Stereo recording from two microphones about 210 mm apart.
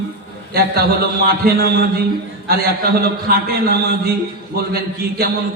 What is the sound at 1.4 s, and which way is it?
A man's voice, 45° right (ahead or behind).